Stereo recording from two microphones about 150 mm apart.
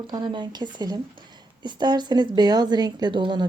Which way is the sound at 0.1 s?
30° right (ahead or behind).